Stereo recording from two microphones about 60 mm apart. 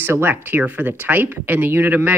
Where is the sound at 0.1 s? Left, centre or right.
Right.